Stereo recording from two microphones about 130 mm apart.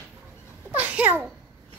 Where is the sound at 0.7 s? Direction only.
10° right (ahead or behind).